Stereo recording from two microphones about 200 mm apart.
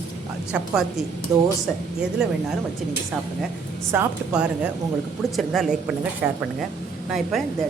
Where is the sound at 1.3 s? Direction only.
15° right (ahead or behind).